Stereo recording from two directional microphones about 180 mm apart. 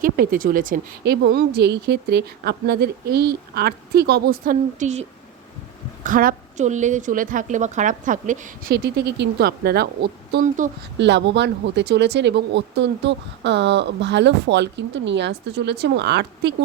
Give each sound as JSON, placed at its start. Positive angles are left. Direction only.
{"t": 0.0, "sound": "a woman's voice", "side_deg": -50}
{"t": 1.1, "sound": "a woman's voice", "side_deg": -70}
{"t": 10.9, "sound": "speech", "side_deg": -75}